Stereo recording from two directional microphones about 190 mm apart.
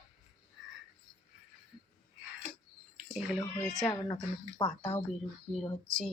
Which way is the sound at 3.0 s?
45° right (ahead or behind).